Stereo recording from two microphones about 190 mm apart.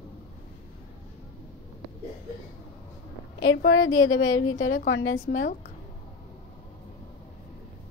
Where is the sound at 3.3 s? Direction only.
80° left.